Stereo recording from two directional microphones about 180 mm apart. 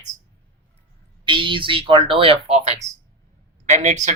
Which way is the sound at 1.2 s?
25° right (ahead or behind).